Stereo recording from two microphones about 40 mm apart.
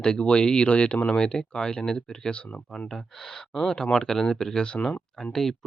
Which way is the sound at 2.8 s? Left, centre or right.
Centre.